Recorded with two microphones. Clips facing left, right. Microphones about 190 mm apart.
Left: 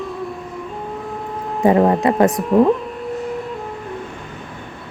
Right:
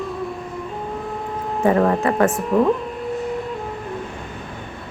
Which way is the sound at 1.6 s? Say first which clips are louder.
Left 3 dB; 20° left (ahead or behind).